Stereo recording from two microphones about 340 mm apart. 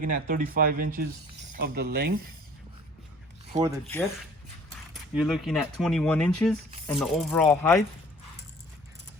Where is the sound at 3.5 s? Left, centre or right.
Centre.